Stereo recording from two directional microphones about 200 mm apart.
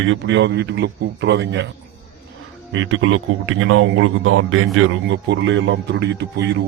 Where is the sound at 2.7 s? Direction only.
75° right (ahead or behind).